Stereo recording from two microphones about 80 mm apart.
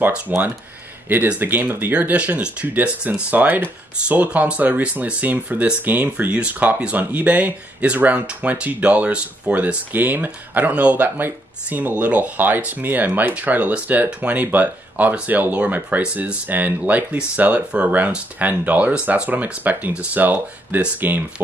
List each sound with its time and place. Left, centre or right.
0.3 s speech: centre